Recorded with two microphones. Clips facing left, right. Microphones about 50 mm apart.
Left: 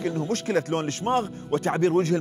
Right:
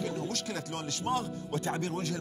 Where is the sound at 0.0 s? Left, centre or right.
Left.